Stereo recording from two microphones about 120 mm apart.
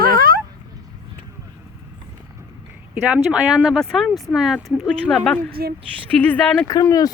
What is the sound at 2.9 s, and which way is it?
Speech, 10° right (ahead or behind).